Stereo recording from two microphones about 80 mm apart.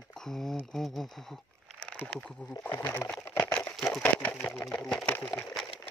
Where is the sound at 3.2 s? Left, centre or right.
Left.